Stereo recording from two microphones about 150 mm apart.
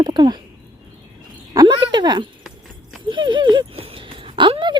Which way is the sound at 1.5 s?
30° right (ahead or behind).